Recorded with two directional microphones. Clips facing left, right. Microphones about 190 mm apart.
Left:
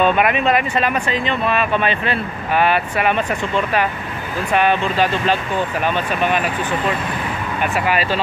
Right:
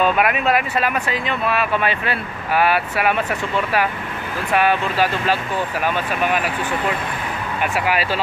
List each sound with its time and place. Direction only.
0.0 s speech: 5° right (ahead or behind)
7.7 s speech: 10° right (ahead or behind)